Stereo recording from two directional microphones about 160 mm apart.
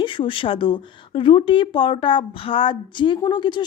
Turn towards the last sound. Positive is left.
turn(degrees=30)  # may be behind; listen again after turning